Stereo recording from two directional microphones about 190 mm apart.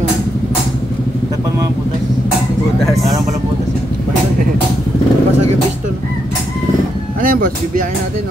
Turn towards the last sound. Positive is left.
turn(degrees=-45)  # may be behind; listen again after turning